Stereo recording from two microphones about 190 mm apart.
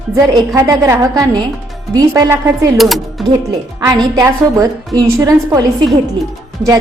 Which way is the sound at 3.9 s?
20° right (ahead or behind).